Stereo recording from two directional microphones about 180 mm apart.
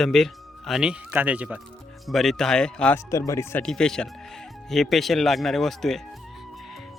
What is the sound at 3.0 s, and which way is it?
Speech, 20° left (ahead or behind).